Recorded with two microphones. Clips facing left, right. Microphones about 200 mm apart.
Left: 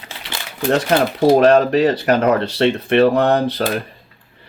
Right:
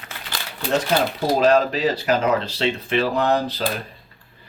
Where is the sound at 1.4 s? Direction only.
60° left (ahead or behind).